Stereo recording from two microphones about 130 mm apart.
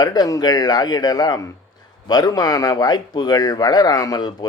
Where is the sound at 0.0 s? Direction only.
30° left (ahead or behind).